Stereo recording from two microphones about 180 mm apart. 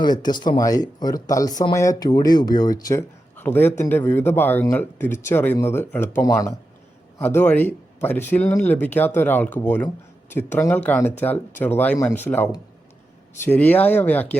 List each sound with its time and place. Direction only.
0.0 s speech: 25° left (ahead or behind)